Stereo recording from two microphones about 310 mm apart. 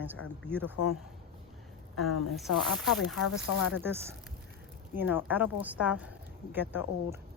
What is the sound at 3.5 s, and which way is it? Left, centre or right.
Speech, left.